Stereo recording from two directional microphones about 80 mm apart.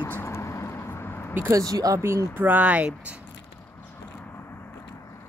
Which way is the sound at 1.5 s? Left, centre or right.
Right.